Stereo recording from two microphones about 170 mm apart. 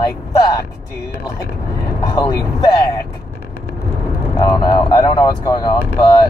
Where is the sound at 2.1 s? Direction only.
20° left (ahead or behind).